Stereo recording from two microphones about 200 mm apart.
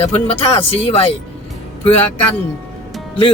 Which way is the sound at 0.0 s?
30° left (ahead or behind).